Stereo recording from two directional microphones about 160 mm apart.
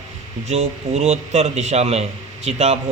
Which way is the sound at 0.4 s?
45° right (ahead or behind).